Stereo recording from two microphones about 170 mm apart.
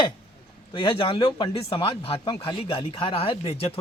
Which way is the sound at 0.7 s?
30° left (ahead or behind).